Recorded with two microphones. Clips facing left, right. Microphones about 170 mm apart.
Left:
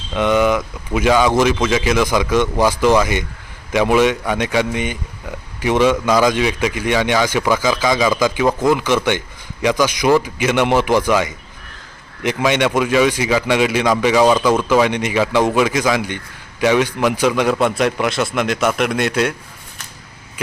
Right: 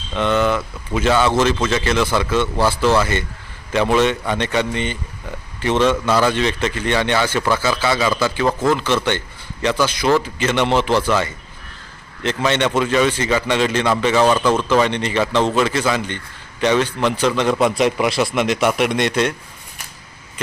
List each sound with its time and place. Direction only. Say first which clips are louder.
0.1 s a man's voice: left 3 dB; 15° left (ahead or behind)
17.6 s speech: even; centre (ahead or behind)